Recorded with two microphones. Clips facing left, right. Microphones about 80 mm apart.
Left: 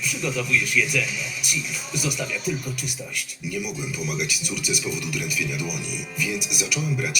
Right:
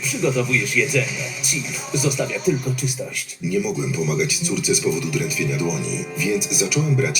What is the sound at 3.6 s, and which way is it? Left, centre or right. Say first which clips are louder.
Speech: right 7 dB; right.